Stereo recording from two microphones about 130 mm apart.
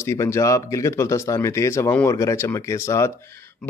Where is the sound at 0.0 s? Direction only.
20° left (ahead or behind).